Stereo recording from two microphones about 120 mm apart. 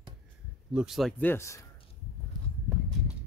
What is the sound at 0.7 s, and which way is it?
Speech, centre (ahead or behind).